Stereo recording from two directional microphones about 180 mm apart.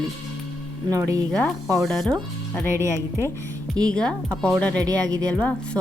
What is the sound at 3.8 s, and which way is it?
A woman's voice, 20° right (ahead or behind).